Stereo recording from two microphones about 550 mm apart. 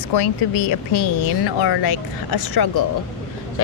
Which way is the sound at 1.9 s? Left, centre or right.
Left.